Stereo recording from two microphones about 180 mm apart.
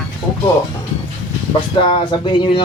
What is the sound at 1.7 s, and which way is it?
Speech, 30° left (ahead or behind).